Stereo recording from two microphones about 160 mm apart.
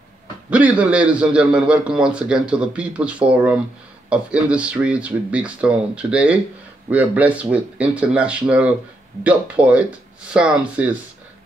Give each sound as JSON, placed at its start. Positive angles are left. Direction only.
{"t": 0.5, "sound": "a man's voice", "side_deg": -10}